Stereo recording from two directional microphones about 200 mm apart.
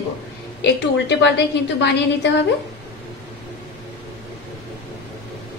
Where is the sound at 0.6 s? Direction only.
60° left (ahead or behind).